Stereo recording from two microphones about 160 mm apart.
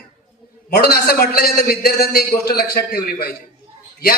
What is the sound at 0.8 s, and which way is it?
A man's voice, 80° left.